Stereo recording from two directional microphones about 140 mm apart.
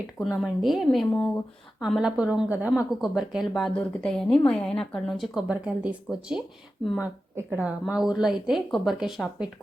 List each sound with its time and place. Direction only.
0.3 s a woman's voice: centre (ahead or behind)